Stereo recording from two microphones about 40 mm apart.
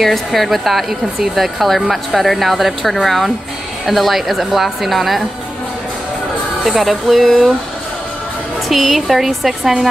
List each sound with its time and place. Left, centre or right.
0.0 s speech: centre
6.6 s speech: centre
8.6 s speech: centre